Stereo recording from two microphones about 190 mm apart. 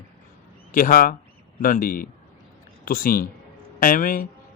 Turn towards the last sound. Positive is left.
turn(degrees=45)  # may be behind; listen again after turning